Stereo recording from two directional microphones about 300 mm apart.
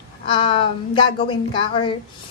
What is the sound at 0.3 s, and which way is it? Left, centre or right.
A woman's voice, centre.